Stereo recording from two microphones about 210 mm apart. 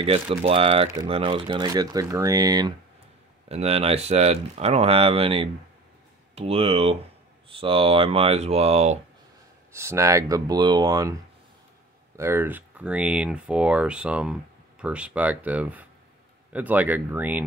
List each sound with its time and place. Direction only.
0.0 s speech: 25° right (ahead or behind)
3.4 s speech: 30° right (ahead or behind)
9.7 s speech: 10° right (ahead or behind)
12.2 s speech: 10° right (ahead or behind)